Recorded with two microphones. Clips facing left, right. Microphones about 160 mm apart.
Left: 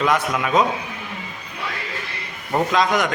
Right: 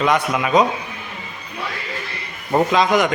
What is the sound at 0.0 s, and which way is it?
Speech, 5° right (ahead or behind).